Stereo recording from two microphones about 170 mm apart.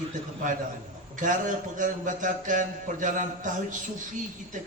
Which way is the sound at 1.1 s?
50° right (ahead or behind).